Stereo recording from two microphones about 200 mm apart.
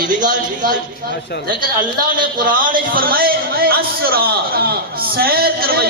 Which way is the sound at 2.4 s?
45° right (ahead or behind).